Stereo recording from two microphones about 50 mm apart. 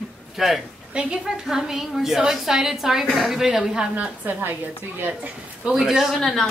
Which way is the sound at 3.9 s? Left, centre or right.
Right.